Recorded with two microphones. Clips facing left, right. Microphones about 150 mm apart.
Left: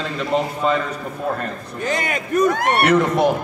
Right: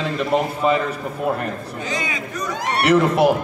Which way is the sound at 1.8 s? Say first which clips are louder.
Left 5 dB; 60° left (ahead or behind).